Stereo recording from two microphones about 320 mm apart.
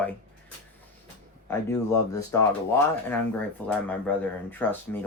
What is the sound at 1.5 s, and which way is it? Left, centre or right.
Speech, centre.